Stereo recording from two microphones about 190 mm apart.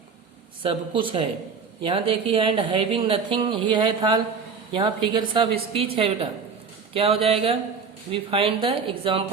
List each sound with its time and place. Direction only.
0.6 s speech: 30° right (ahead or behind)